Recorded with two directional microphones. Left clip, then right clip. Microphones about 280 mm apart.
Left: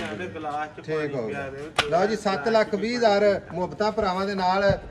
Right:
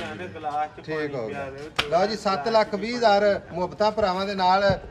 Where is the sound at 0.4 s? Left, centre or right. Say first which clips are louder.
Right 5 dB; right.